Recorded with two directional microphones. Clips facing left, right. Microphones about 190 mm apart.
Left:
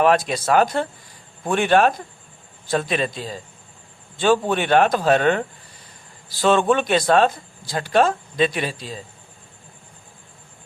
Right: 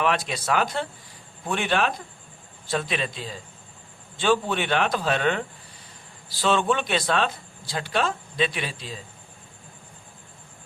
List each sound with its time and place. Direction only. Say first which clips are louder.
0.0 s speech: left 7 dB; 45° left (ahead or behind)
6.4 s speech: left 5 dB; 50° left (ahead or behind)